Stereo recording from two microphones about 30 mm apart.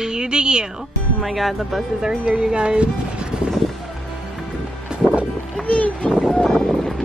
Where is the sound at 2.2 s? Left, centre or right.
Right.